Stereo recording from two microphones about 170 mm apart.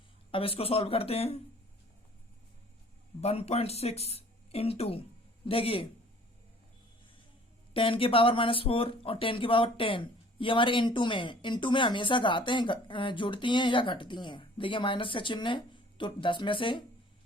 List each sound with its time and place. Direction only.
0.3 s speech: 35° left (ahead or behind)
3.2 s speech: 40° left (ahead or behind)
7.7 s speech: 30° left (ahead or behind)